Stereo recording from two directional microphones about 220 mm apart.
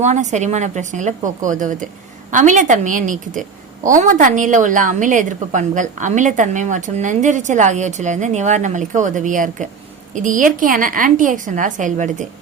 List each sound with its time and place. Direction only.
0.0 s a woman's voice: 30° right (ahead or behind)